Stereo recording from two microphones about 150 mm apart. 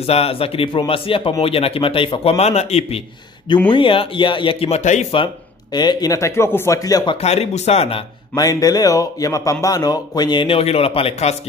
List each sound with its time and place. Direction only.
0.0 s speech: 40° left (ahead or behind)
5.1 s speech: 30° left (ahead or behind)
7.2 s speech: 45° left (ahead or behind)
8.4 s speech: 25° left (ahead or behind); by 11.3 s 45° left (ahead or behind)